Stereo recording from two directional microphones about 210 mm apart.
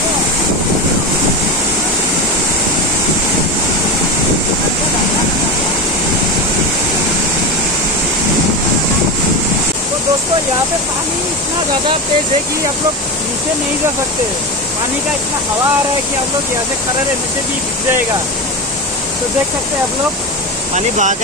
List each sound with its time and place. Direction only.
20.7 s speech: 35° right (ahead or behind)